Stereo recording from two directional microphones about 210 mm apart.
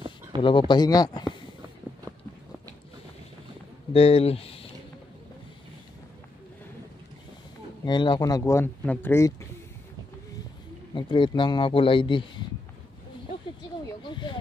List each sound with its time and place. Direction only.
0.4 s a man's voice: 25° left (ahead or behind)
3.9 s speech: 25° left (ahead or behind)
7.8 s speech: 20° left (ahead or behind)
11.0 s a man's voice: 20° left (ahead or behind)
14.0 s a sound: 20° left (ahead or behind)